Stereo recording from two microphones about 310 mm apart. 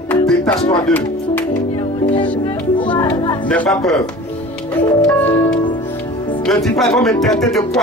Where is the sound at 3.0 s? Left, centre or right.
Centre.